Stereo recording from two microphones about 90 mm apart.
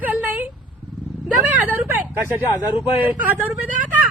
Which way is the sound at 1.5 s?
20° right (ahead or behind).